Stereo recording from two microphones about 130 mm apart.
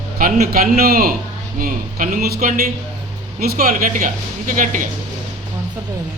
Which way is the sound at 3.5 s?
90° right.